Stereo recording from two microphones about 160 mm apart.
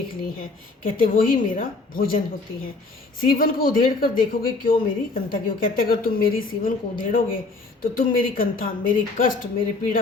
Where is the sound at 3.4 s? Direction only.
65° left (ahead or behind).